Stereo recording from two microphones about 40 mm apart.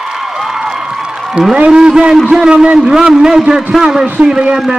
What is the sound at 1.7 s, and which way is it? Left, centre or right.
A man's voice, centre.